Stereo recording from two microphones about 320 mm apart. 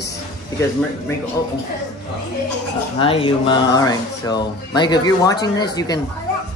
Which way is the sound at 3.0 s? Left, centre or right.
Centre.